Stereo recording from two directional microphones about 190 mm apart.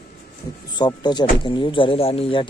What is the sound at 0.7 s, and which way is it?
Speech, 25° left (ahead or behind).